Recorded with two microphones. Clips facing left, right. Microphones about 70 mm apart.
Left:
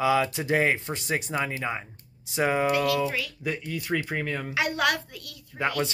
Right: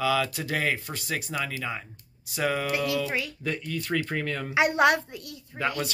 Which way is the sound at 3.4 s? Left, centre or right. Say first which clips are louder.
Even; centre.